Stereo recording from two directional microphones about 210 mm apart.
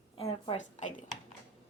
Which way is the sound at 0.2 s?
30° left (ahead or behind).